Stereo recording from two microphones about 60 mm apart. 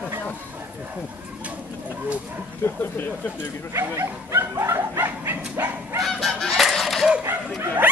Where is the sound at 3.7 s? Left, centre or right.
Right.